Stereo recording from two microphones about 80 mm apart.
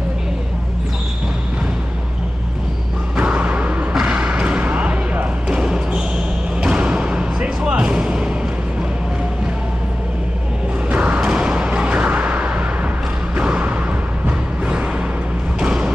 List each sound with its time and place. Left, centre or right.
3.2 s music: centre
3.9 s basketball bounce: centre
6.6 s music: centre
10.9 s a sound: centre
15.6 s music: centre